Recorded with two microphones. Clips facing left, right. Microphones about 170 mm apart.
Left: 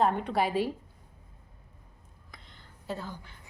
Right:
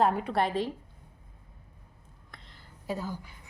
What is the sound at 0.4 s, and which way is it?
Speech, 10° left (ahead or behind).